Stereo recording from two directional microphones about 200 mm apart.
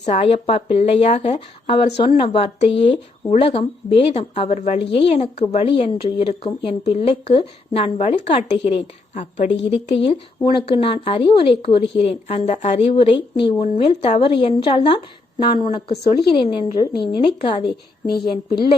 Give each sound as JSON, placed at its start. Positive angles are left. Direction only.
{"t": 0.0, "sound": "a woman's voice", "side_deg": 30}
{"t": 18.0, "sound": "a woman's voice", "side_deg": 50}